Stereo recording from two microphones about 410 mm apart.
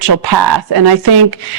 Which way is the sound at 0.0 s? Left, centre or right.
Right.